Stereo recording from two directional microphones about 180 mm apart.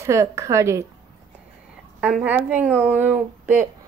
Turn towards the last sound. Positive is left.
turn(degrees=-10)  # may be behind; listen again after turning